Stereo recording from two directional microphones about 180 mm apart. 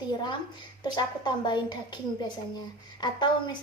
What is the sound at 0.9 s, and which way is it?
Speech, 25° left (ahead or behind).